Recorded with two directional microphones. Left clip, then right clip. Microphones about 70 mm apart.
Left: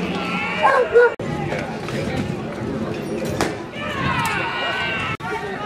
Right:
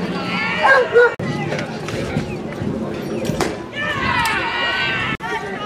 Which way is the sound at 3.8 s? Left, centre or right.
Right.